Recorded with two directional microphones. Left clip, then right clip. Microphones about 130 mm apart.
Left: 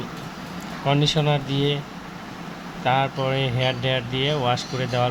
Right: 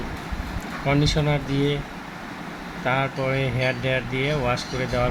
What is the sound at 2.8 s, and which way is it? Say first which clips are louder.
Speech: left 2 dB; 10° left (ahead or behind).